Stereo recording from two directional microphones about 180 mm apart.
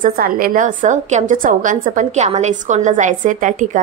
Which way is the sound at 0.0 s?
55° right (ahead or behind).